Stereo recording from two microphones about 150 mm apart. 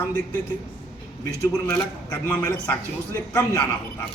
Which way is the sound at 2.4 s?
10° left (ahead or behind).